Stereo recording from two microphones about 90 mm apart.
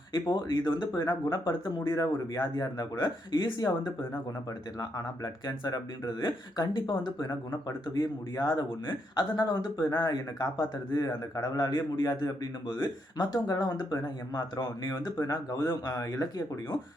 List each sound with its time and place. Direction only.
0.1 s a man's voice: 55° left (ahead or behind)